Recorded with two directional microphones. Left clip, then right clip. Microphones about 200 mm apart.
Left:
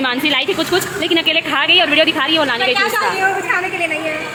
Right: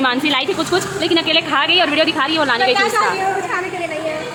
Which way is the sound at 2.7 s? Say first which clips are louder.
Right 1 dB; 20° right (ahead or behind).